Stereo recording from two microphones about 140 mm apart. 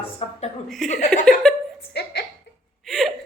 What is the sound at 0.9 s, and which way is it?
Speech, 60° left (ahead or behind).